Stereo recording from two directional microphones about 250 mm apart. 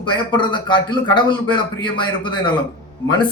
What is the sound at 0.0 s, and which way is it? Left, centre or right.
A man's voice, centre.